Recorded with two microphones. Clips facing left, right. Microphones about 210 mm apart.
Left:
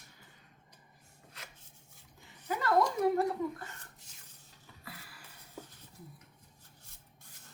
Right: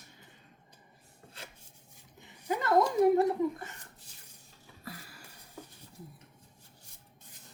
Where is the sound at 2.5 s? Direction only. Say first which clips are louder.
Right 3 dB; 25° right (ahead or behind).